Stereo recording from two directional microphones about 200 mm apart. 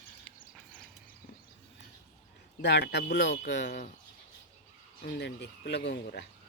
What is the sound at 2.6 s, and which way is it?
Speech, 60° left (ahead or behind).